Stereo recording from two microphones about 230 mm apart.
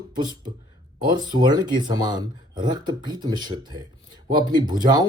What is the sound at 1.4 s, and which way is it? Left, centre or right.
Speech, centre.